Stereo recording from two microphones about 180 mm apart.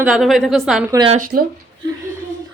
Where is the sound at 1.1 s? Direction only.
50° right (ahead or behind).